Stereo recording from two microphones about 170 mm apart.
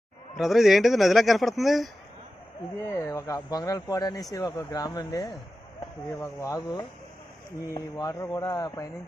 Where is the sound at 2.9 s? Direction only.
15° left (ahead or behind).